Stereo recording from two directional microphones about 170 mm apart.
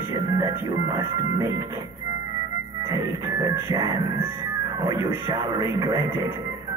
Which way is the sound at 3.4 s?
20° right (ahead or behind).